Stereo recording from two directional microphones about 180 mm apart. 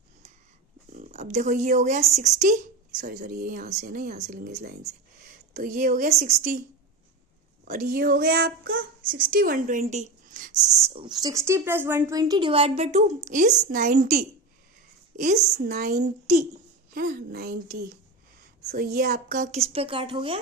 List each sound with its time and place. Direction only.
0.9 s speech: 40° right (ahead or behind); by 4.5 s 55° right (ahead or behind)
5.5 s speech: 55° right (ahead or behind)
7.6 s speech: 55° right (ahead or behind); by 12.2 s 15° right (ahead or behind)
12.2 s speech: 25° right (ahead or behind)
15.6 s a woman's voice: 50° right (ahead or behind); by 20.4 s 30° right (ahead or behind)